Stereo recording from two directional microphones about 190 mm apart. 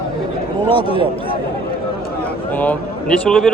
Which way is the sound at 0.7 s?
30° left (ahead or behind).